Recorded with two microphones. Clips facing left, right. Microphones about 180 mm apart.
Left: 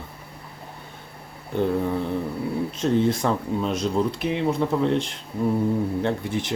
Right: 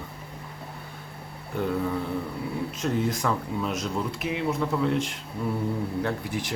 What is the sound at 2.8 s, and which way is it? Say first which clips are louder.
Speech: left 6 dB; 30° left (ahead or behind).